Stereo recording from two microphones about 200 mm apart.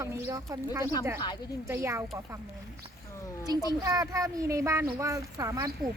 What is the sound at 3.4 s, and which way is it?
A child's voice, 20° right (ahead or behind).